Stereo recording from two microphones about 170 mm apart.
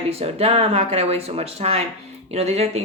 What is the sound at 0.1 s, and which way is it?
Speech, 35° right (ahead or behind).